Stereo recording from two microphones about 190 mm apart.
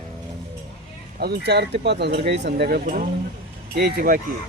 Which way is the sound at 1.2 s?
60° right (ahead or behind).